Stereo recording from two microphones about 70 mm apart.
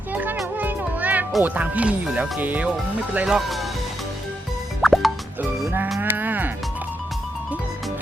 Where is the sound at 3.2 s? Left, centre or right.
Centre.